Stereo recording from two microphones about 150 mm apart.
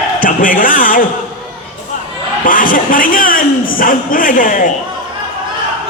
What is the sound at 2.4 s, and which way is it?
A man's voice, 65° left (ahead or behind).